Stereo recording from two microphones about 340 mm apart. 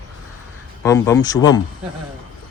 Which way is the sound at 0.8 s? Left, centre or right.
Centre.